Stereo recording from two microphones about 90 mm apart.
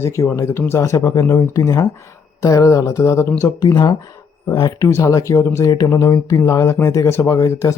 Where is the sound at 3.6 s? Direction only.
50° left (ahead or behind).